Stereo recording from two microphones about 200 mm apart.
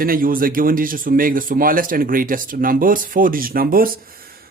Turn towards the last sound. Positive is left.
turn(degrees=-45)  # may be behind; listen again after turning